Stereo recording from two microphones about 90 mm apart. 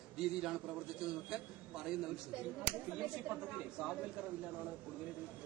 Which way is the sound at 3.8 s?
5° right (ahead or behind).